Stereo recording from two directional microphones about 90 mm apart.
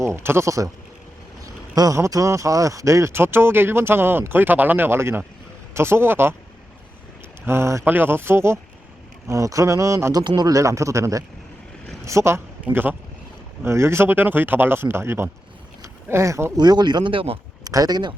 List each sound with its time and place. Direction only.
0.0 s speech: 30° right (ahead or behind)
1.7 s a man's voice: 45° right (ahead or behind); by 6.3 s 25° right (ahead or behind)
7.4 s speech: 30° right (ahead or behind)
12.6 s speech: 20° right (ahead or behind)
13.6 s speech: 30° right (ahead or behind)
15.8 s a sound: 30° right (ahead or behind)
16.6 s speech: 55° right (ahead or behind); by 17.4 s 85° right
17.6 s speech: 45° right (ahead or behind)